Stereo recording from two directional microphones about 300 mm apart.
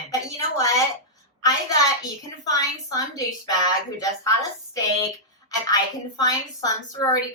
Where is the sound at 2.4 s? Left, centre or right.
Centre.